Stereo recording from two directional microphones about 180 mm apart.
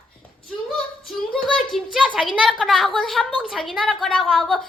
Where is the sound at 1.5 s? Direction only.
Centre (ahead or behind).